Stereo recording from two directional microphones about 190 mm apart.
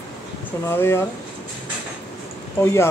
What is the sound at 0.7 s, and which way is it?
Speech, 10° left (ahead or behind).